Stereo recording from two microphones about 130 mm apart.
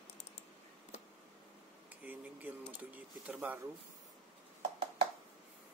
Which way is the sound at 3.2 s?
10° right (ahead or behind).